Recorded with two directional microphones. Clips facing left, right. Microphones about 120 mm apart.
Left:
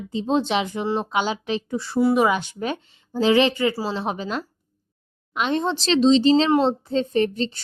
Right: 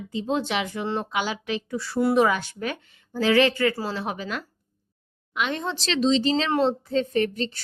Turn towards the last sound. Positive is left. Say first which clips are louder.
# left 3 dB
turn(degrees=25)  # may be behind; listen again after turning